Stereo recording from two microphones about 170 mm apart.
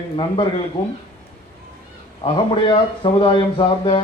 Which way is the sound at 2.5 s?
30° left (ahead or behind).